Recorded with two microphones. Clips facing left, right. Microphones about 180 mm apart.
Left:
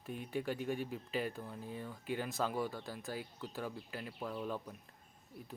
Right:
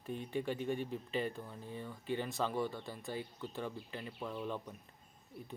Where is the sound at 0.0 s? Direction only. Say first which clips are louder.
Right 1 dB; 5° left (ahead or behind).